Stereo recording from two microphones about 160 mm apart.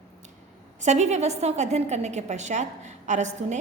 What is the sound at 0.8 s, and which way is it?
A woman's voice, 45° right (ahead or behind).